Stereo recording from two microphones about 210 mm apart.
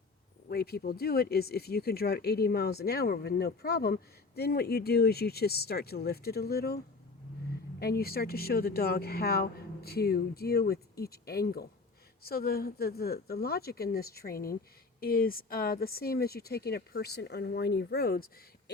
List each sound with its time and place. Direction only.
0.4 s speech: 50° left (ahead or behind)
7.8 s speech: 45° left (ahead or behind)